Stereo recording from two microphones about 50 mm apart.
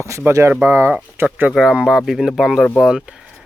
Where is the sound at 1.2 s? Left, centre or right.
Right.